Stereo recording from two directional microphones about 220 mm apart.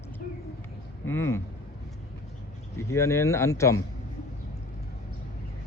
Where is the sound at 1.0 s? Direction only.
10° left (ahead or behind).